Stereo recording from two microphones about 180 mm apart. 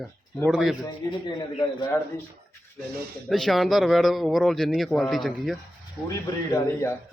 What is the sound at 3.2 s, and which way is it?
Speech, centre (ahead or behind).